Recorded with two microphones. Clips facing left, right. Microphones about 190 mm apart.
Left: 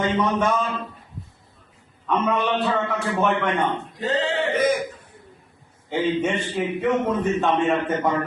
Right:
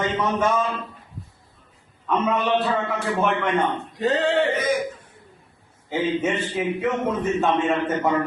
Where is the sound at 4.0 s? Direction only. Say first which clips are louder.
Right 3 dB; 65° right (ahead or behind).